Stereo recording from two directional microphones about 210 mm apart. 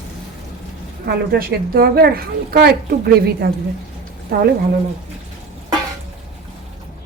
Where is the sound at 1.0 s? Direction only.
50° right (ahead or behind).